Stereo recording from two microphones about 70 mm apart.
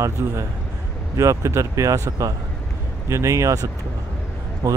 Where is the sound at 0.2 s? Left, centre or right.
Right.